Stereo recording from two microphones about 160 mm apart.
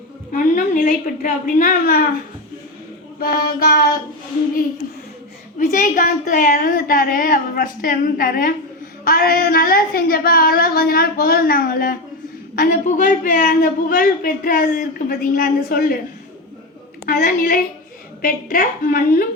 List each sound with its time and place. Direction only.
0.3 s a man's voice: 55° left (ahead or behind)
3.2 s a woman's voice: 65° left (ahead or behind)
5.5 s a man's voice: 55° left (ahead or behind)
12.5 s a man's voice: 55° left (ahead or behind)
17.1 s a man's voice: 60° left (ahead or behind)